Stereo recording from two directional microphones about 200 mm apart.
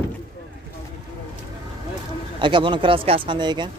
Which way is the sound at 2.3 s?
25° right (ahead or behind).